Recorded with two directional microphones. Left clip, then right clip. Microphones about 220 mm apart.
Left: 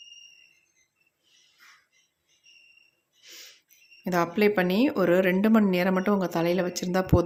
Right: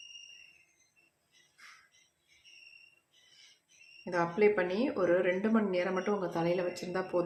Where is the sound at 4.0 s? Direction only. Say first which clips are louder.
Left 4 dB; 50° left (ahead or behind).